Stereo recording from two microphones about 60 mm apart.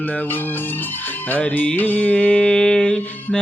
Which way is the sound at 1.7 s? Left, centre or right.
Left.